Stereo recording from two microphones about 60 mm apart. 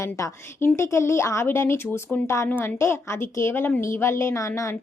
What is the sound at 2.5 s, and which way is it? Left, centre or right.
Speech, left.